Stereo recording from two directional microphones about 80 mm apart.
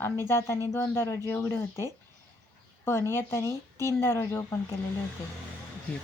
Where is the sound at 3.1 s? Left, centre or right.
Left.